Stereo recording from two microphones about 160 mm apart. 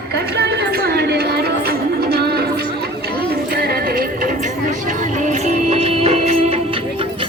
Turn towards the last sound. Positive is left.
turn(degrees=-40)  # may be behind; listen again after turning